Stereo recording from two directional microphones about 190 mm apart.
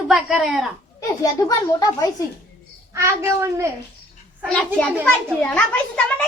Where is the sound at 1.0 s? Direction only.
20° left (ahead or behind).